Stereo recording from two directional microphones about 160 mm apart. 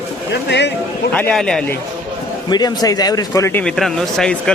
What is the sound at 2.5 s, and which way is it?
Speech, 25° left (ahead or behind).